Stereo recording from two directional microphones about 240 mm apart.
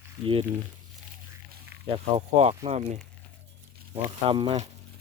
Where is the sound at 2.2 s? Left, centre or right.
Right.